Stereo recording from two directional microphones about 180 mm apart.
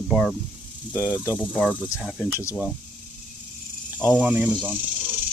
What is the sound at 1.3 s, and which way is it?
Speech, centre (ahead or behind).